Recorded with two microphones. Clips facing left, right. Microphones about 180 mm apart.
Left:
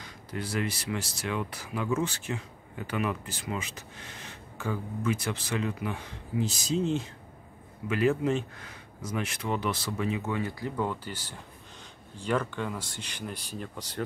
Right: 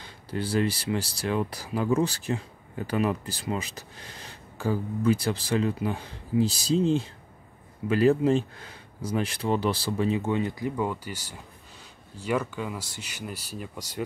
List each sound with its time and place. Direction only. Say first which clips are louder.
0.0 s speech: right 4 dB; 30° right (ahead or behind); by 14.0 s 10° right (ahead or behind)